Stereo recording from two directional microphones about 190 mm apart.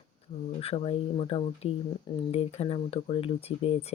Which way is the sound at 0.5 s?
30° left (ahead or behind).